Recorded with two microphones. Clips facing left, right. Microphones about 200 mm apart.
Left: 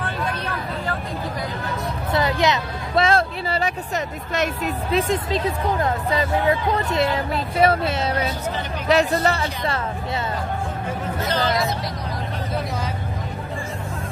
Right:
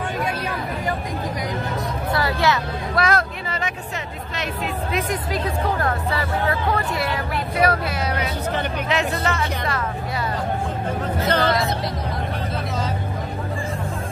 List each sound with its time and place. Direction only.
0.0 s vehicle: 15° right (ahead or behind)
2.1 s vehicle: 20° left (ahead or behind); by 3.7 s 35° left (ahead or behind)
4.9 s speech: 25° left (ahead or behind)
8.8 s speech: 35° left (ahead or behind)
11.2 s speech: 60° right (ahead or behind)